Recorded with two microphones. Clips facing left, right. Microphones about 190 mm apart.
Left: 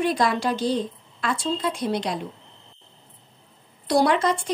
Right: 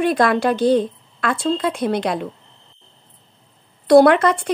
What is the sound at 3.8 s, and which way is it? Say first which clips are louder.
Speech: right 9 dB; 60° right (ahead or behind).